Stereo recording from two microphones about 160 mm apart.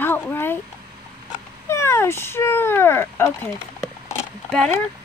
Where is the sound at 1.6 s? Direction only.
15° left (ahead or behind).